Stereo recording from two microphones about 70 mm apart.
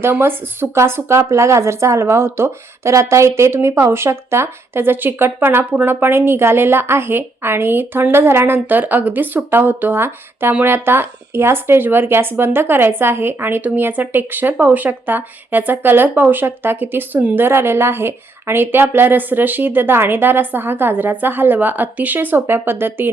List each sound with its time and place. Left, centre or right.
0.0 s a woman's voice: right